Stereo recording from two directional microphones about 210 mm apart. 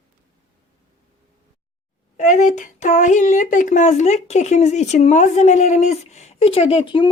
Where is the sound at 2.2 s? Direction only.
35° left (ahead or behind).